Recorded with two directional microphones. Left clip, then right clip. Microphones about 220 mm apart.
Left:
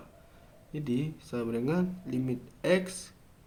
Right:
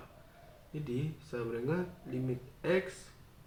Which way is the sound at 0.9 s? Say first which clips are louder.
Left 6 dB; 50° left (ahead or behind).